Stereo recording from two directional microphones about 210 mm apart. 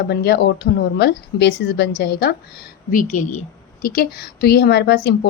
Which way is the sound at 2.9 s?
40° left (ahead or behind).